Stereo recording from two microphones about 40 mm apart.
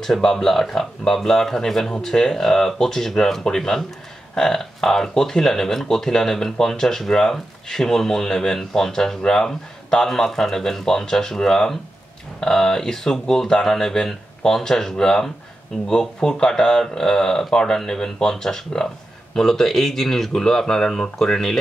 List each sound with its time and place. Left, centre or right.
0.0 s speech: centre